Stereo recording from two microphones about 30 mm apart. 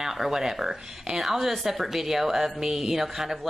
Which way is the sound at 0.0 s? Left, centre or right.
Centre.